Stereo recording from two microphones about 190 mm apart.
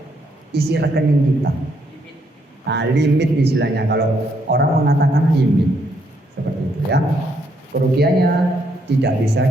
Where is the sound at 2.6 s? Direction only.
65° right (ahead or behind).